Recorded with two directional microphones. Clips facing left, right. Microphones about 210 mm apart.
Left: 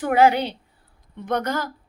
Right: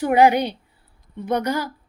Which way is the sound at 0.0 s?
15° right (ahead or behind).